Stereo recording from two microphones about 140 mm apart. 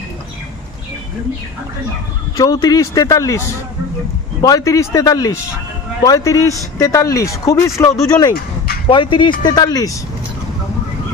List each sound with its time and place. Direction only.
2.3 s speech: 25° left (ahead or behind)